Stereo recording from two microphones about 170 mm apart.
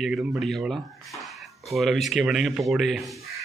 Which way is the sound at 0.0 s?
Centre (ahead or behind).